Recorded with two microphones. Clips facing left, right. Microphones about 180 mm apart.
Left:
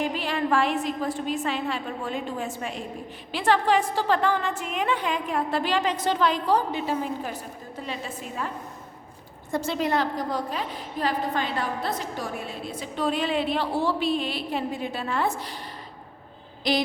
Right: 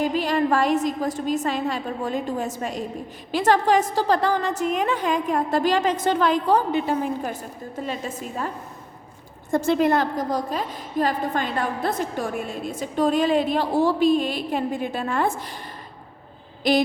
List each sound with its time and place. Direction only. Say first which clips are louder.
0.0 s a woman's voice: right 5 dB; 40° right (ahead or behind)
9.5 s a woman's voice: right 6 dB; 50° right (ahead or behind)
16.7 s a woman's voice: right 5 dB; 50° right (ahead or behind)